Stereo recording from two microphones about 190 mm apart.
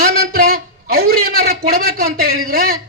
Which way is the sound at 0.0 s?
50° right (ahead or behind).